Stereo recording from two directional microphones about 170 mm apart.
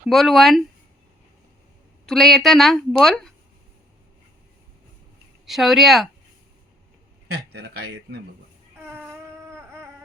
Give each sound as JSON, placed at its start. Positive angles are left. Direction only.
{"t": 0.1, "sound": "a woman's voice", "side_deg": 0}
{"t": 2.0, "sound": "a woman's voice", "side_deg": 0}
{"t": 5.5, "sound": "a woman's voice", "side_deg": 0}
{"t": 7.5, "sound": "speech", "side_deg": -75}
{"t": 9.0, "sound": "a sound", "side_deg": -15}